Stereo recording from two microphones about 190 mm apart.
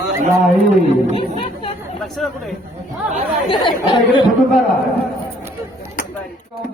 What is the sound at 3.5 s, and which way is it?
Speech, 25° left (ahead or behind).